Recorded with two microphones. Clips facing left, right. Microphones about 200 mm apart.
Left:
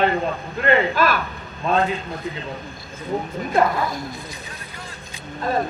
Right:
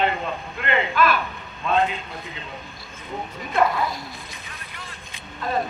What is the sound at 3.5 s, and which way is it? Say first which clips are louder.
Speech: left 2 dB; 50° left (ahead or behind).